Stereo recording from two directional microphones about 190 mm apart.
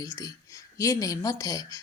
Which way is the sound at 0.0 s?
20° left (ahead or behind).